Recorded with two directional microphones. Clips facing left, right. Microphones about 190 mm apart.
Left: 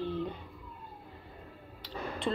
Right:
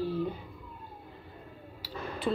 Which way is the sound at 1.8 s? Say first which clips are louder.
Even; 5° right (ahead or behind).